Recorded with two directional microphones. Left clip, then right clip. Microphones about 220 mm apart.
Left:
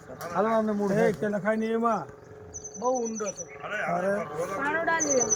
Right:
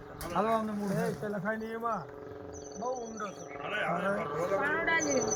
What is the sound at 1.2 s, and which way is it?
Speech, 55° left (ahead or behind).